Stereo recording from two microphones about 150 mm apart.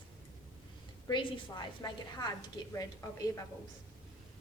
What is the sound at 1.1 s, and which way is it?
A woman's voice, 30° left (ahead or behind).